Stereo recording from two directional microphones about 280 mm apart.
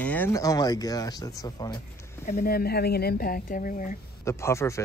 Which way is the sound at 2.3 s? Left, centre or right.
Left.